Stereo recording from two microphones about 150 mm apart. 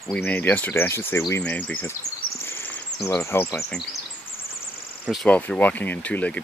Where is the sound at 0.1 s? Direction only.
10° left (ahead or behind).